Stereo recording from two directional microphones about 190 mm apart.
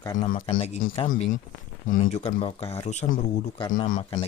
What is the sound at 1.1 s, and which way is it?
Speech, 45° left (ahead or behind).